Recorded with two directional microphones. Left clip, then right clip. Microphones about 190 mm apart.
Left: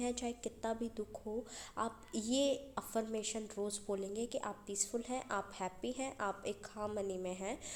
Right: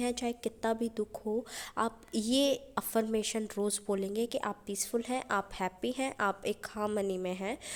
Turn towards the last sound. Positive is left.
turn(degrees=-30)  # may be behind; listen again after turning